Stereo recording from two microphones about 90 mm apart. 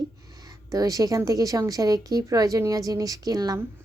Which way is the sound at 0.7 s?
40° right (ahead or behind).